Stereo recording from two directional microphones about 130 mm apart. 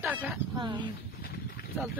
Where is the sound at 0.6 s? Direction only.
35° right (ahead or behind).